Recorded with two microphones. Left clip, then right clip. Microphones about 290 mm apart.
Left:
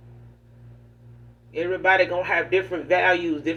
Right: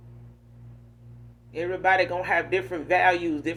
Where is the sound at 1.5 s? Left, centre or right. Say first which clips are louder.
Left 3 dB; right.